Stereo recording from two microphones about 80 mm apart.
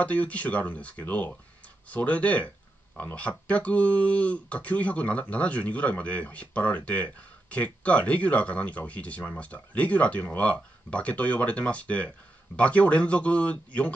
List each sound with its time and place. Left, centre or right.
0.0 s speech: centre